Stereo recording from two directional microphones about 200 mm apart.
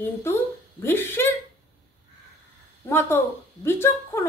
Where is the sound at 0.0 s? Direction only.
10° left (ahead or behind).